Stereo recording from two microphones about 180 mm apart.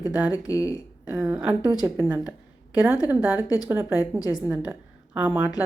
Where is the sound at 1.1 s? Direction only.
5° right (ahead or behind).